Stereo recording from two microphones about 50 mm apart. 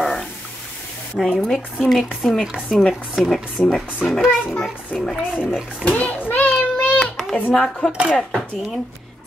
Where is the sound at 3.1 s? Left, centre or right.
Centre.